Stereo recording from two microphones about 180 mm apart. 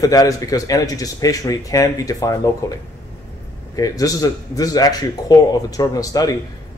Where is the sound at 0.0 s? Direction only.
20° left (ahead or behind).